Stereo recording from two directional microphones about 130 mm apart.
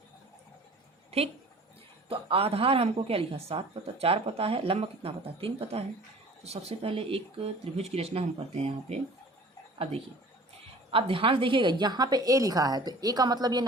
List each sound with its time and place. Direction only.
2.0 s a woman's voice: 45° right (ahead or behind)